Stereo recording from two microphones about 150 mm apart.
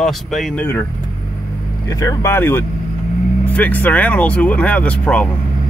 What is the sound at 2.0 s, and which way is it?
Speech, 20° left (ahead or behind).